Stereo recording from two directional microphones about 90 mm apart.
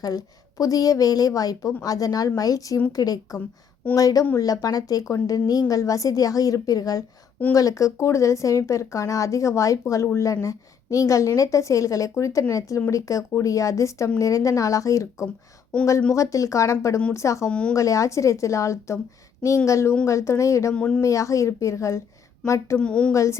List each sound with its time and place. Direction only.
0.0 s a woman's voice: 40° left (ahead or behind)
17.5 s speech: 10° left (ahead or behind)
17.7 s speech: 35° left (ahead or behind)
20.7 s speech: 10° left (ahead or behind)
21.0 s speech: 35° left (ahead or behind)
22.8 s speech: 10° left (ahead or behind)
23.1 s speech: 35° left (ahead or behind)